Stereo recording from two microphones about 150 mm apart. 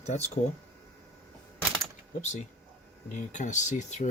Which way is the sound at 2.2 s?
50° left (ahead or behind).